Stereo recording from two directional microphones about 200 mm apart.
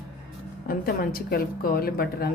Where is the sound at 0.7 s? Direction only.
45° left (ahead or behind).